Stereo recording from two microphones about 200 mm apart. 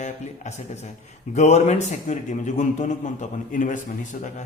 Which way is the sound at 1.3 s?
35° left (ahead or behind).